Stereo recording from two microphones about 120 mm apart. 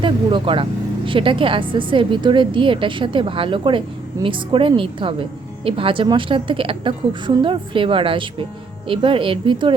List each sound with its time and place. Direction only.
0.0 s a woman's voice: 45° right (ahead or behind)